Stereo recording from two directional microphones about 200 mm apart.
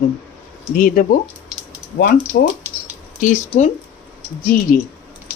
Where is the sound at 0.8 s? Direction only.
45° left (ahead or behind).